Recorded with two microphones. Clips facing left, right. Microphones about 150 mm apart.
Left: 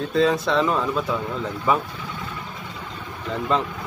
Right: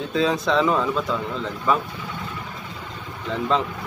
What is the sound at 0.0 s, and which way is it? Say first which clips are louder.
Speech: left 2 dB; centre (ahead or behind).